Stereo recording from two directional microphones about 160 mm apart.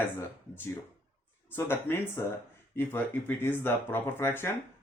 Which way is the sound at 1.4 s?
15° left (ahead or behind).